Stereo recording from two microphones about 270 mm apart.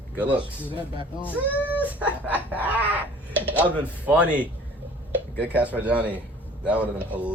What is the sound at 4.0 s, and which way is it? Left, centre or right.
Snicker, centre.